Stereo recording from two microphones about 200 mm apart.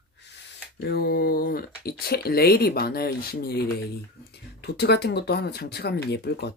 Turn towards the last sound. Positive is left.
turn(degrees=55)  # may be behind; listen again after turning